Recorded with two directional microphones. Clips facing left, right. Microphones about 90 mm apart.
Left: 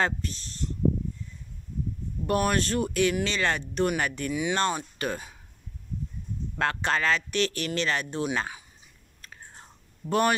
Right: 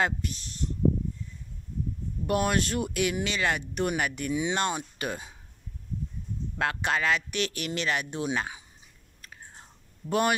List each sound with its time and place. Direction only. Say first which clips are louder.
0.0 s speech: even; 10° right (ahead or behind)
2.2 s speech: left 1 dB; 15° right (ahead or behind)
4.3 s speech: even; 25° right (ahead or behind)
4.6 s speech: left 2 dB; 15° right (ahead or behind)
6.6 s speech: left 1 dB; 10° right (ahead or behind)
9.2 s whispering: left 1 dB; 10° right (ahead or behind)